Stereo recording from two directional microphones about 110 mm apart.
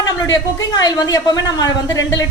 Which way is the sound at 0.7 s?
35° left (ahead or behind).